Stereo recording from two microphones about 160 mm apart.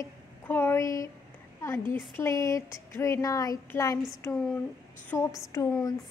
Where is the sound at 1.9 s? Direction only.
15° left (ahead or behind).